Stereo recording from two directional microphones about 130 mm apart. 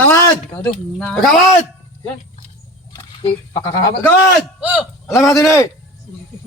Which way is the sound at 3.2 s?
30° left (ahead or behind).